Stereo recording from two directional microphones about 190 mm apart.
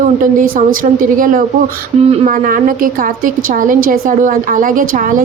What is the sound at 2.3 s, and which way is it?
A woman's voice, 45° right (ahead or behind).